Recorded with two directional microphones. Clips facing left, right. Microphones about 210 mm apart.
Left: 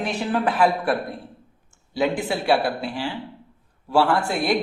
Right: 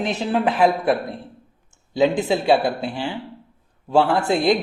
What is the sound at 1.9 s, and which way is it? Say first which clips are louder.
Speech: right 5 dB; 20° right (ahead or behind).